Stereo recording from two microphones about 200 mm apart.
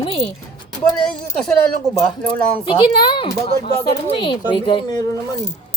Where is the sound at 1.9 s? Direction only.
25° left (ahead or behind).